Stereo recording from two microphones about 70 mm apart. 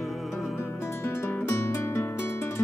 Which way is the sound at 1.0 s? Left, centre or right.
Left.